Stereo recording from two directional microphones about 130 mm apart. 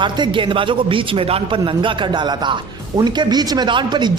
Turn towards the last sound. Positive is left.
turn(degrees=-35)  # may be behind; listen again after turning